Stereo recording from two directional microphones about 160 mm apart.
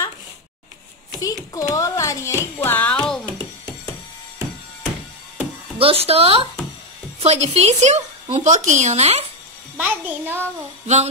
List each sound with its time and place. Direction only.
1.2 s speech: 20° left (ahead or behind)
3.3 s music: 25° right (ahead or behind)
5.8 s speech: 35° right (ahead or behind)
9.8 s a child's voice: 10° right (ahead or behind)